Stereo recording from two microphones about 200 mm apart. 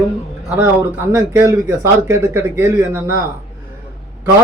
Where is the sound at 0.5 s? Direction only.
10° right (ahead or behind).